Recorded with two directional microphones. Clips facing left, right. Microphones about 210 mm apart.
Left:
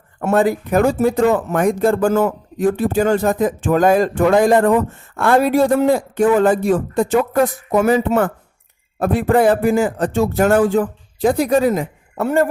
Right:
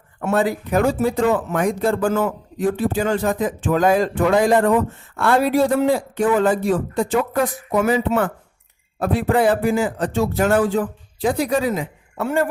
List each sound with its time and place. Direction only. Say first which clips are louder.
0.2 s speech: left 4 dB; 45° left (ahead or behind)